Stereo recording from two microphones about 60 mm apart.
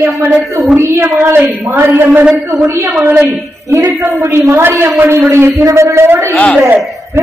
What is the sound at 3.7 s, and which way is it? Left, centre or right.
A woman's voice, right.